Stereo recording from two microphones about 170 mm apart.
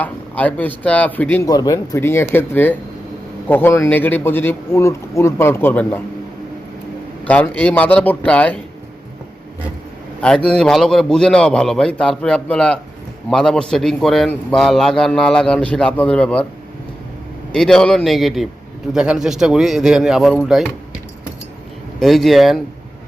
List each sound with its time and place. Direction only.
0.0 s a man's voice: 10° left (ahead or behind)
1.5 s a man's voice: 20° left (ahead or behind)
7.3 s a man's voice: 10° left (ahead or behind)
10.2 s a man's voice: 5° left (ahead or behind)
17.5 s a man's voice: 5° left (ahead or behind)
22.0 s a man's voice: centre (ahead or behind)